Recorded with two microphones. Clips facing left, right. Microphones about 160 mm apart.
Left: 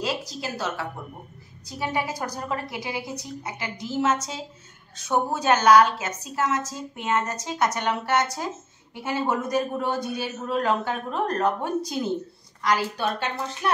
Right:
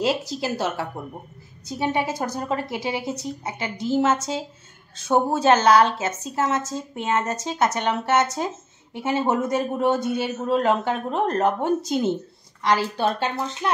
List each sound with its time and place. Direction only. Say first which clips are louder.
0.0 s a woman's voice: right 6 dB; 25° right (ahead or behind)